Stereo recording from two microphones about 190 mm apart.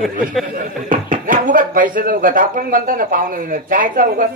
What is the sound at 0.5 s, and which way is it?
Speech, 45° right (ahead or behind).